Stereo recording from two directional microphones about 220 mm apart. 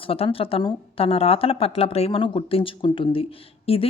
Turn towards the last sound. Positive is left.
turn(degrees=25)  # may be behind; listen again after turning